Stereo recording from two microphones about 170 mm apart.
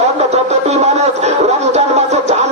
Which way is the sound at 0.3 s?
40° right (ahead or behind).